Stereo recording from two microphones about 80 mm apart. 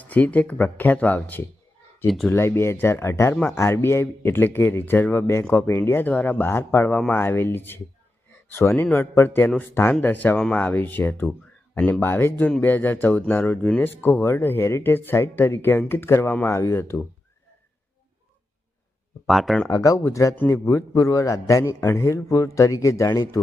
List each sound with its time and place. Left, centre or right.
0.0 s speech: centre
2.3 s a man's voice: left
10.3 s speech: centre
10.6 s a man's voice: left
19.3 s speech: centre
19.6 s a man's voice: left